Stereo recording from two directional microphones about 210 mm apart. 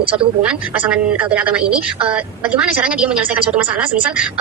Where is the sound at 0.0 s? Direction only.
25° right (ahead or behind).